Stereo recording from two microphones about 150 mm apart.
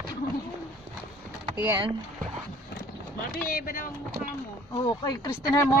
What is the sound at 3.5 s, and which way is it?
Speech, 70° left (ahead or behind).